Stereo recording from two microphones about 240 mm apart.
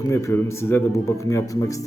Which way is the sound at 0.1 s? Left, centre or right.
Centre.